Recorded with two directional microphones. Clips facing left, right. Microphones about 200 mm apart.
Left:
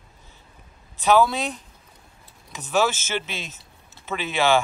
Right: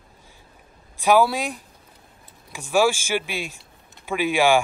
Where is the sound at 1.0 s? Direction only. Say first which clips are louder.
Right 1 dB; 10° right (ahead or behind).